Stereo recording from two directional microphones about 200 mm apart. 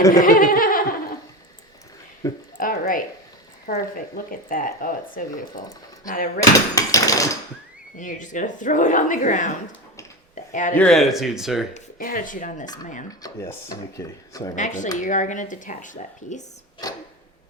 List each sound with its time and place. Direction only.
0.1 s speech: 45° left (ahead or behind)
2.2 s speech: 15° left (ahead or behind)
2.6 s speech: 45° left (ahead or behind)
6.7 s speech: 15° left (ahead or behind)
7.9 s a woman's voice: 40° left (ahead or behind)
10.3 s a sound: 40° left (ahead or behind)
10.8 s speech: centre (ahead or behind)
11.7 s a woman's voice: 45° left (ahead or behind)
13.1 s speech: 15° left (ahead or behind)
14.5 s a woman's voice: 40° left (ahead or behind)
16.8 s speech: 20° left (ahead or behind)